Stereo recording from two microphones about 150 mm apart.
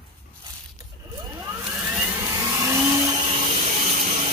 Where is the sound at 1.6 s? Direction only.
10° right (ahead or behind).